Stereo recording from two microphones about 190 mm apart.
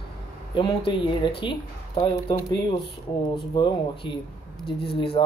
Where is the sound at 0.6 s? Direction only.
25° left (ahead or behind).